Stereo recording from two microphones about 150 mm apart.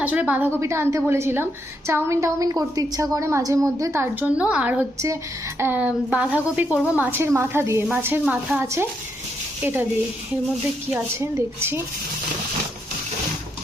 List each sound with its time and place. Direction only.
0.0 s a woman's voice: 10° right (ahead or behind)
11.2 s a woman's voice: 15° right (ahead or behind)